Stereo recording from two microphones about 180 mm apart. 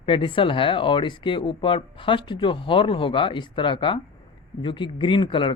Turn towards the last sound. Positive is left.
turn(degrees=30)  # may be behind; listen again after turning